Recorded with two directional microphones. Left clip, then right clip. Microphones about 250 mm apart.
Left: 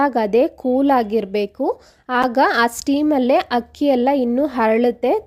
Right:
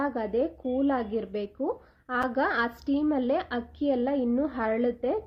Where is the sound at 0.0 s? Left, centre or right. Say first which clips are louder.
Left 12 dB; left.